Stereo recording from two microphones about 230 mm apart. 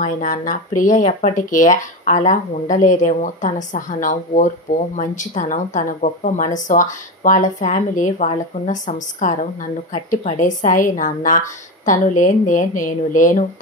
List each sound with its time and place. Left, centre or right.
0.0 s speech: left